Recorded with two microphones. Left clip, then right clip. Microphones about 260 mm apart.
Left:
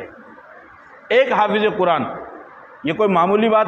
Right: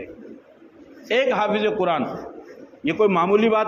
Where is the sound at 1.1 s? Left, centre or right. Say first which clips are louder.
Left 5 dB; left.